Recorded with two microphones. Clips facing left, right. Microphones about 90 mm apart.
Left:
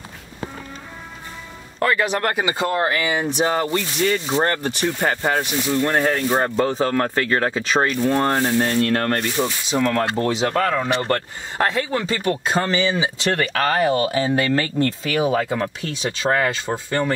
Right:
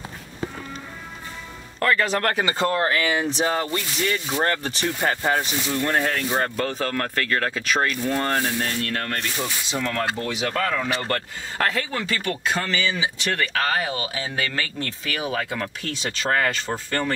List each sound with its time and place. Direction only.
1.8 s speech: 15° left (ahead or behind)
8.5 s rub: 35° left (ahead or behind)
9.4 s speech: 10° left (ahead or behind)
9.9 s speech: 35° left (ahead or behind); by 17.1 s 15° left (ahead or behind)